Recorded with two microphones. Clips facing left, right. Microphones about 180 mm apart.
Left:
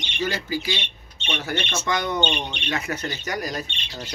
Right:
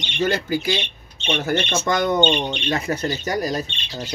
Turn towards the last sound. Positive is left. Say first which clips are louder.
# right 5 dB
turn(degrees=-30)  # may be behind; listen again after turning